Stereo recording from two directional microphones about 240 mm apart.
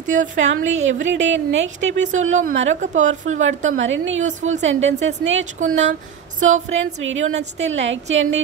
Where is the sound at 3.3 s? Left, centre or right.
Right.